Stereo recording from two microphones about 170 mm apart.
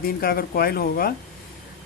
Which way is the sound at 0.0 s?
60° left (ahead or behind).